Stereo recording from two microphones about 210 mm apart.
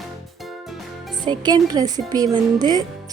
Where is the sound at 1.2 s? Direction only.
20° right (ahead or behind).